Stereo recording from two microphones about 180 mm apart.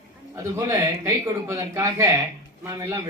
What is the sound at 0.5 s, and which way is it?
Speech, 15° right (ahead or behind).